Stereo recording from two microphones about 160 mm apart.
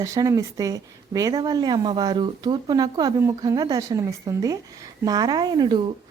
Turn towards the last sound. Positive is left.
turn(degrees=-25)  # may be behind; listen again after turning